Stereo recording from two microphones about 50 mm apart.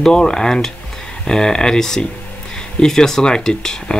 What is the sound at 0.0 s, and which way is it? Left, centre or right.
Speech, centre.